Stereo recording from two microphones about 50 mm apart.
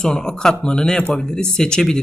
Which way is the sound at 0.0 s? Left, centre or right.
Centre.